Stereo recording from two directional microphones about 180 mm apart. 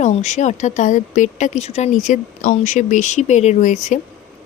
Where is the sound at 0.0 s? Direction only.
40° left (ahead or behind).